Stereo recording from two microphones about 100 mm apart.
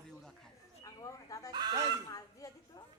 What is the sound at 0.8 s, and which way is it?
Speech, 35° left (ahead or behind).